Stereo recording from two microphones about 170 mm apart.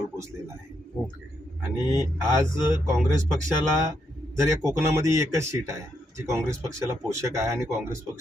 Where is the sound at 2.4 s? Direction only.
15° right (ahead or behind).